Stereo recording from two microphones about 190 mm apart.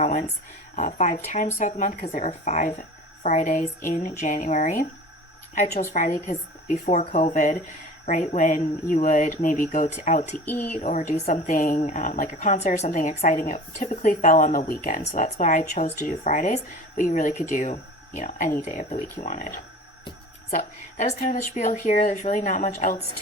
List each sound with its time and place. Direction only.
0.0 s a woman's voice: 40° left (ahead or behind)
5.9 s a woman's voice: 40° left (ahead or behind)
10.3 s speech: 10° left (ahead or behind)
10.7 s a woman's voice: 40° left (ahead or behind)
11.5 s a woman's voice: 45° left (ahead or behind)
20.6 s a woman's voice: 40° left (ahead or behind)